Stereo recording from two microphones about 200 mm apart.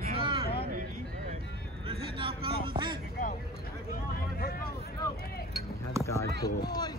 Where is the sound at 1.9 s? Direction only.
25° right (ahead or behind).